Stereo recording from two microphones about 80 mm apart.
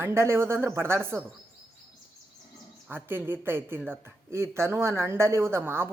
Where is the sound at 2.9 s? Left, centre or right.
Right.